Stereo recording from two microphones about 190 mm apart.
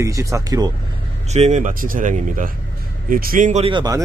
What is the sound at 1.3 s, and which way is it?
Speech, 40° right (ahead or behind).